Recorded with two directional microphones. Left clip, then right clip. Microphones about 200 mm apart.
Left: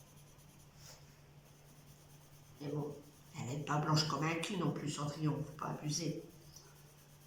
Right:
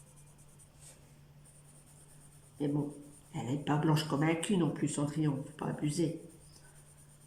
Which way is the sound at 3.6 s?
40° right (ahead or behind).